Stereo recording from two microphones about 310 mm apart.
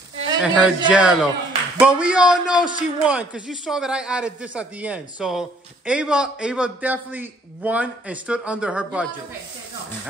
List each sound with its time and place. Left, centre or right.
0.4 s speech: centre